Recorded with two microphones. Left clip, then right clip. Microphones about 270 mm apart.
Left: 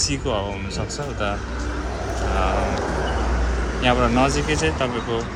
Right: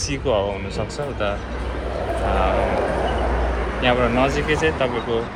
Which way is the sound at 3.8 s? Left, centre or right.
Centre.